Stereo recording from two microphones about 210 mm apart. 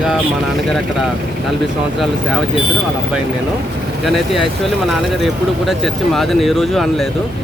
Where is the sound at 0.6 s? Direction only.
Centre (ahead or behind).